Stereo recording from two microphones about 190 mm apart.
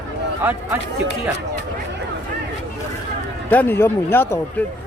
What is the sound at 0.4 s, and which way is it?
Speech, 10° right (ahead or behind).